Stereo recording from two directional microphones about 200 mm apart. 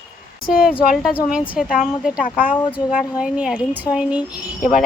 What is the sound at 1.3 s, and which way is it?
A woman's voice, 5° right (ahead or behind).